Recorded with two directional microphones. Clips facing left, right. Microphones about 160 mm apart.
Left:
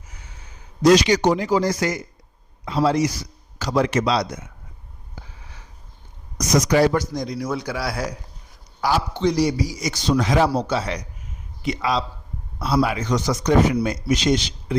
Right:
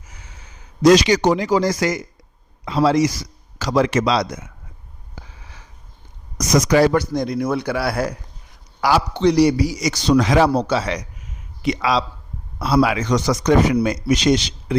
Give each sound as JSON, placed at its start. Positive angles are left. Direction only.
{"t": 0.1, "sound": "a sound", "side_deg": -90}
{"t": 0.8, "sound": "a man's voice", "side_deg": -90}
{"t": 6.4, "sound": "a man's voice", "side_deg": -90}
{"t": 8.8, "sound": "a man's voice", "side_deg": -85}